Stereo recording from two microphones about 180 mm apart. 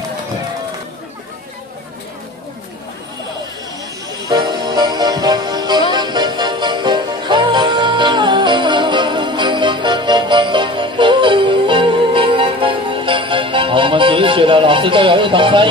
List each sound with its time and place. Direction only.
4.3 s music: 25° right (ahead or behind)